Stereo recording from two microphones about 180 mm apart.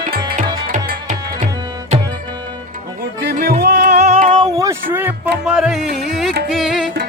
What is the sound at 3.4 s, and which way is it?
Music, 65° right (ahead or behind).